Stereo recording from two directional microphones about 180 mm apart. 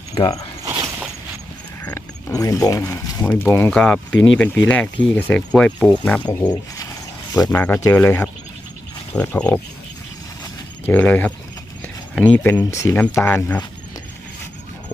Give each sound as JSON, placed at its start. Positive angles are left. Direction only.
{"t": 0.1, "sound": "speech", "side_deg": 25}
{"t": 0.6, "sound": "a sound", "side_deg": -20}
{"t": 1.8, "sound": "speech", "side_deg": 10}
{"t": 7.5, "sound": "speech", "side_deg": 10}
{"t": 10.4, "sound": "a sound", "side_deg": 10}
{"t": 12.1, "sound": "speech", "side_deg": 10}